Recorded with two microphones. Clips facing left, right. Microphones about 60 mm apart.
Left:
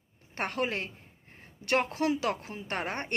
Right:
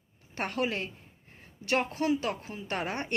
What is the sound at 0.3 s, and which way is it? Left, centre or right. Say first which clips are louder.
Speech: even; left.